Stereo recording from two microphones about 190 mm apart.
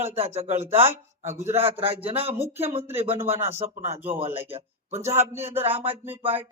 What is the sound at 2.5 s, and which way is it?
Speech, 10° right (ahead or behind).